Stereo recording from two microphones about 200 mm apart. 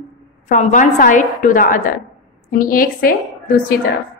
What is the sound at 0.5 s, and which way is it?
A woman's voice, 35° left (ahead or behind).